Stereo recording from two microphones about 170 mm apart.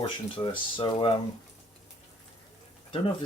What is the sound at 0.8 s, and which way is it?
Speech, 30° left (ahead or behind).